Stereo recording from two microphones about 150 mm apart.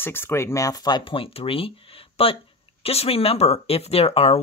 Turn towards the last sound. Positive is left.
turn(degrees=40)  # may be behind; listen again after turning